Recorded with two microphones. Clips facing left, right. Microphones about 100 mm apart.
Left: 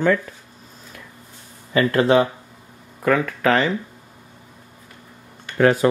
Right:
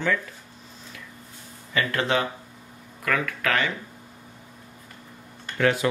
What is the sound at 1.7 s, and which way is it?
Speech, 30° left (ahead or behind).